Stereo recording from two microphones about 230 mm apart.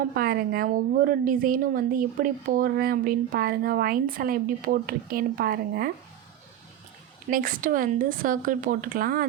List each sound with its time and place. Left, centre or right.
0.0 s a woman's voice: right
7.3 s a woman's voice: right